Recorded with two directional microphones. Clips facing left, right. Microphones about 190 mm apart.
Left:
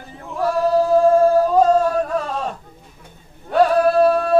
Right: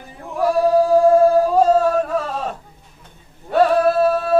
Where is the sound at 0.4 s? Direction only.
15° right (ahead or behind).